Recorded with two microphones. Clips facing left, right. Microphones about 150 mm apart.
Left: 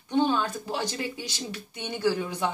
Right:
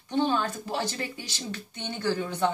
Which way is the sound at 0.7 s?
15° left (ahead or behind).